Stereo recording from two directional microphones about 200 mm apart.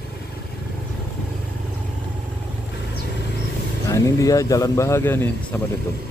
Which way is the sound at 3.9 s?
15° left (ahead or behind).